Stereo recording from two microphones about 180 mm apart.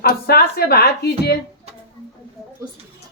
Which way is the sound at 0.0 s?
60° left (ahead or behind).